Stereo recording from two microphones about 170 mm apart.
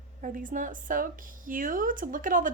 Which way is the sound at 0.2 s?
50° right (ahead or behind).